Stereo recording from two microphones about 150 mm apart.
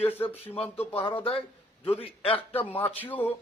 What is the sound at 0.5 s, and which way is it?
Speech, 40° left (ahead or behind).